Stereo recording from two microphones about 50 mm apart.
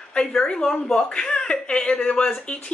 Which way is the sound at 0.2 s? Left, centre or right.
Centre.